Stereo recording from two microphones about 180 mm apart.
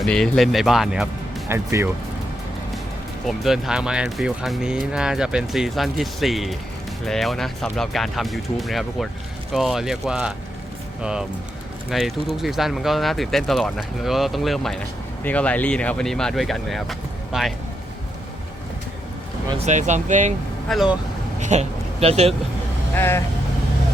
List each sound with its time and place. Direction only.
0.0 s speech: centre (ahead or behind)
1.5 s speech: 15° right (ahead or behind)
3.2 s speech: centre (ahead or behind)
19.5 s speech: 40° right (ahead or behind)
20.7 s speech: centre (ahead or behind)
21.4 s speech: 40° right (ahead or behind)
23.0 s speech: 15° left (ahead or behind)